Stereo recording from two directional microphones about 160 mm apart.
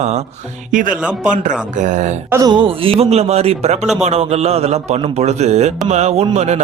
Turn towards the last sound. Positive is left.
turn(degrees=-45)  # may be behind; listen again after turning